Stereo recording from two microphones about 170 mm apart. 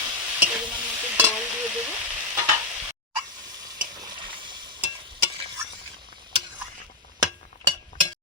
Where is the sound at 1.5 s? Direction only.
10° right (ahead or behind).